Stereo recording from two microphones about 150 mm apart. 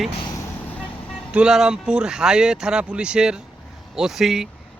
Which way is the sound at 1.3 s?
5° right (ahead or behind).